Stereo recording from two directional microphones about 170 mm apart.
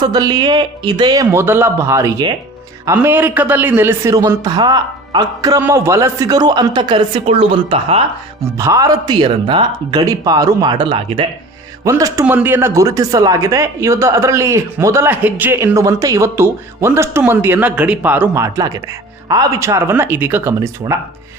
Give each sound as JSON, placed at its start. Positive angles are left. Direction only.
{"t": 0.0, "sound": "a man's voice", "side_deg": -25}
{"t": 8.4, "sound": "a man's voice", "side_deg": -15}
{"t": 11.9, "sound": "a man's voice", "side_deg": -20}